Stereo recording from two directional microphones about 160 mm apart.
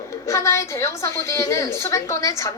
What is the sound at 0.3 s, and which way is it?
A woman's voice, 20° left (ahead or behind).